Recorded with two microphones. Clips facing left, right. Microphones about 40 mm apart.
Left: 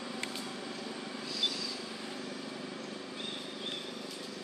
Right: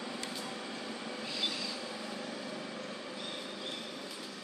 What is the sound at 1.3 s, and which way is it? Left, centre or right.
Vehicle, right.